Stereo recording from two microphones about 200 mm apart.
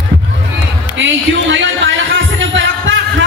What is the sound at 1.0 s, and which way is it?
Music, 65° right (ahead or behind).